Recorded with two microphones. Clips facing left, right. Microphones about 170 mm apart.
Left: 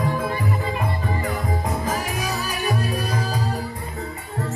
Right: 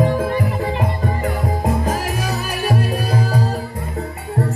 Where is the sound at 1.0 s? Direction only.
50° right (ahead or behind).